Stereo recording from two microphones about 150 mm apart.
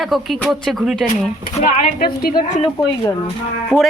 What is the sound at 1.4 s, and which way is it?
Speech, 60° left (ahead or behind).